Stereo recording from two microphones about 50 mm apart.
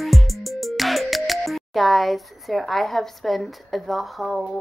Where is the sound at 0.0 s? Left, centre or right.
Centre.